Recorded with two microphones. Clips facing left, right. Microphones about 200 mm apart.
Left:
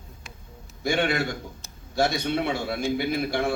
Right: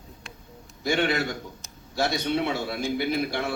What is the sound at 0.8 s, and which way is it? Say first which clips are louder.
A man's voice: even; 50° left (ahead or behind).